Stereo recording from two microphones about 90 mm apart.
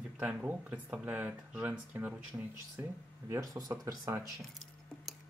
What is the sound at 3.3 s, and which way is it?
Speech, 45° right (ahead or behind).